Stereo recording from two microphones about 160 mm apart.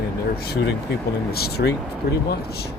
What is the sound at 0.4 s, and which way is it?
Speech, 90° left.